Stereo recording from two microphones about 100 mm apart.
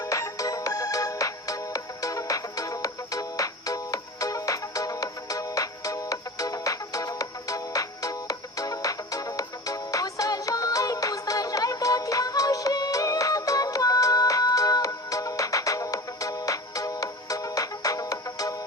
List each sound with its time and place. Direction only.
0.0 s music: 35° left (ahead or behind)